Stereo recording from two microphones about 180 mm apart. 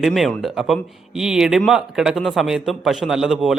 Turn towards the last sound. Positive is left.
turn(degrees=0)  # may be behind; listen again after turning